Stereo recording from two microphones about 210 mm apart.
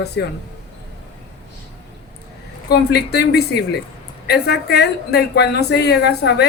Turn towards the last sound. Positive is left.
turn(degrees=50)  # may be behind; listen again after turning